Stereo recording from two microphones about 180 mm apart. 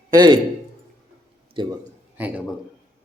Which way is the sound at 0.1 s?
25° right (ahead or behind).